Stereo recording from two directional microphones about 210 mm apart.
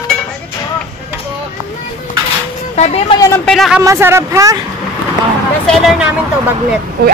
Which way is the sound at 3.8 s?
10° right (ahead or behind).